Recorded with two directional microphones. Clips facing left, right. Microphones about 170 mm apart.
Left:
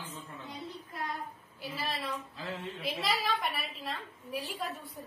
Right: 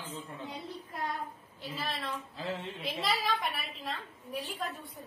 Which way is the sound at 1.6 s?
10° left (ahead or behind).